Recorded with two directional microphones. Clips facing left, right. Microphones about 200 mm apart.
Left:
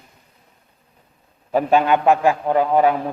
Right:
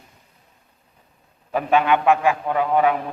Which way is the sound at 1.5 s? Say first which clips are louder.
Left 2 dB; 35° left (ahead or behind).